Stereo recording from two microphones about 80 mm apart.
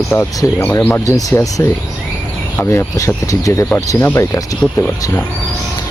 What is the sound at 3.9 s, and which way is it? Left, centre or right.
Speech, left.